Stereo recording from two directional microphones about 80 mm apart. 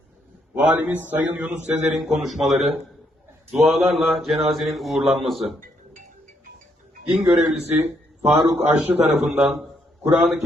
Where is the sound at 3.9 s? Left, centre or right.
Centre.